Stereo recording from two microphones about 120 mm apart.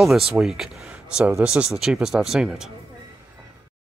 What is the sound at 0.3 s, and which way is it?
Speech, 5° right (ahead or behind).